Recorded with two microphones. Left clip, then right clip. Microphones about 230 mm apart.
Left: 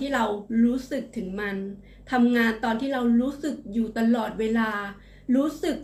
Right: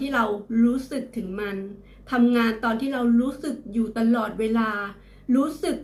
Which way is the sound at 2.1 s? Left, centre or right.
Centre.